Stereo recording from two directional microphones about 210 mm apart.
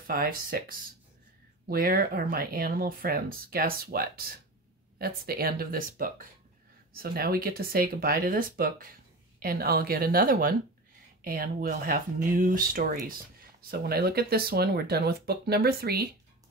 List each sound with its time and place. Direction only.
0.0 s speech: 45° right (ahead or behind)